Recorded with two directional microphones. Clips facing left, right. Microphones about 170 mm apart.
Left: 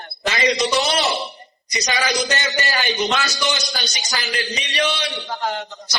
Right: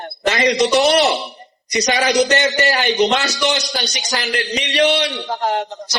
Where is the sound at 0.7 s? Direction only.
60° right (ahead or behind).